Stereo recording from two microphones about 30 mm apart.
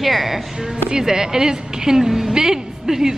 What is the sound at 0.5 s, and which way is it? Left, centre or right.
A woman's voice, right.